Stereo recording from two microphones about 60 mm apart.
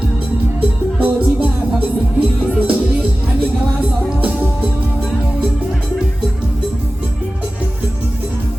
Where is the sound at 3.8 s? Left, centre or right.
Right.